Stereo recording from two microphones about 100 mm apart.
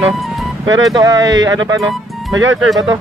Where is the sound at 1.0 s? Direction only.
40° right (ahead or behind).